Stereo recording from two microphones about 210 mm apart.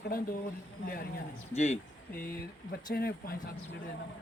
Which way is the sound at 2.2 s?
45° left (ahead or behind).